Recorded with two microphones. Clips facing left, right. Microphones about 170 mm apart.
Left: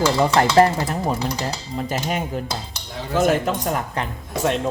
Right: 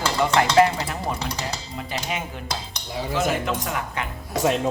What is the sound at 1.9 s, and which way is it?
Dishes, 45° left (ahead or behind).